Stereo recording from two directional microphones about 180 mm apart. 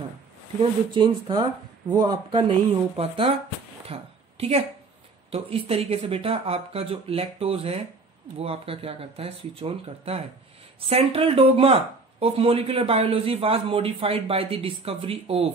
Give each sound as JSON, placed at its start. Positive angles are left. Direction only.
{"t": 0.6, "sound": "speech", "side_deg": -25}
{"t": 3.8, "sound": "a sound", "side_deg": -35}
{"t": 5.3, "sound": "a man's voice", "side_deg": -35}